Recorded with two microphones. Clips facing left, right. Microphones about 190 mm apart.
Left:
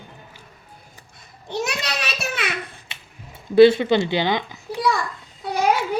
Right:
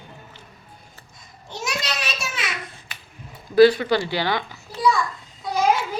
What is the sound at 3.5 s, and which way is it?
Speech, 25° left (ahead or behind).